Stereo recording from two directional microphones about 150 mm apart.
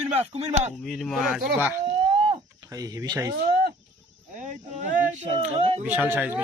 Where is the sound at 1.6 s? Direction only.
15° right (ahead or behind).